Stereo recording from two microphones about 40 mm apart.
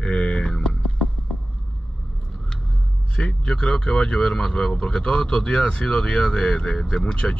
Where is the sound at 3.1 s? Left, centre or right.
Left.